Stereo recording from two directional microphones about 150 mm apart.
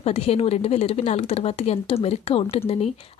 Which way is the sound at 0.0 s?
45° left (ahead or behind).